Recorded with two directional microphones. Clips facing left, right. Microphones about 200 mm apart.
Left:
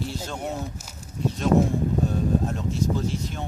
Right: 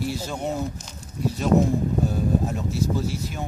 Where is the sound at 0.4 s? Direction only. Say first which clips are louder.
Right 4 dB; 5° left (ahead or behind).